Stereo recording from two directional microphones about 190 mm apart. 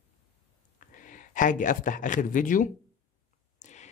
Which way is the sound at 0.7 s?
45° left (ahead or behind).